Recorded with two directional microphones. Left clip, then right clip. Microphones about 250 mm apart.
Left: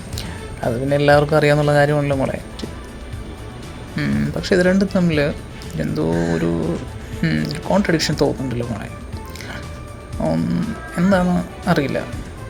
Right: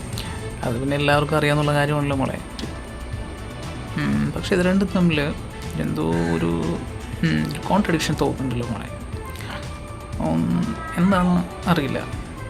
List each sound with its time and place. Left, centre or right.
0.2 s speech: centre
3.9 s speech: centre
10.2 s speech: centre